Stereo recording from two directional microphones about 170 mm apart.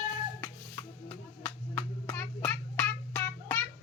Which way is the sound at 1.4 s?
10° left (ahead or behind).